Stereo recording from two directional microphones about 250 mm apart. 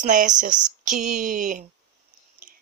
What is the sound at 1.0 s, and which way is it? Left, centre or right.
Speech, right.